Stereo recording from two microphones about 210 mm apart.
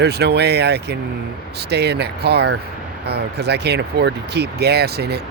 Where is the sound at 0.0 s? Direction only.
50° right (ahead or behind).